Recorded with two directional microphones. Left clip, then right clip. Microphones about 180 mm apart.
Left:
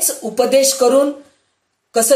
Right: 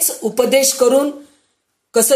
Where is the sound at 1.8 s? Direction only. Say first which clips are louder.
Even; 50° right (ahead or behind).